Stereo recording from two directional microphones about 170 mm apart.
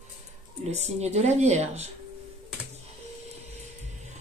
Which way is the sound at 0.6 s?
40° right (ahead or behind).